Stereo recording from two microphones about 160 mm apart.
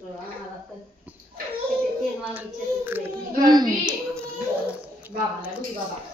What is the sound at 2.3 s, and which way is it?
Speech, 15° right (ahead or behind).